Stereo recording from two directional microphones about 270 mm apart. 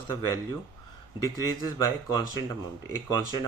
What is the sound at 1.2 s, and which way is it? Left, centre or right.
Speech, centre.